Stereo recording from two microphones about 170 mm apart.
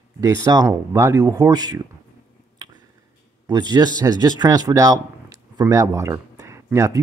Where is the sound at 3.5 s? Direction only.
25° right (ahead or behind).